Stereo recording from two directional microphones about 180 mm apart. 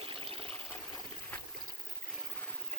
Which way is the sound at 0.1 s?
30° right (ahead or behind).